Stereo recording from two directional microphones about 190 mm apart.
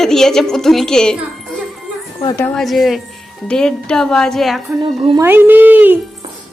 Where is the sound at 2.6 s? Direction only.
Centre (ahead or behind).